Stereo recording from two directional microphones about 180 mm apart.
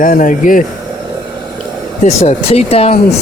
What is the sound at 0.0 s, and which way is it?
Speech, 50° left (ahead or behind).